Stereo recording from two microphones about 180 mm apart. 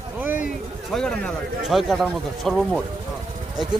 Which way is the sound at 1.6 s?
Centre (ahead or behind).